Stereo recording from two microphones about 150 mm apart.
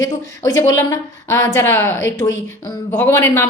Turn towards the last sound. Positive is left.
turn(degrees=15)  # may be behind; listen again after turning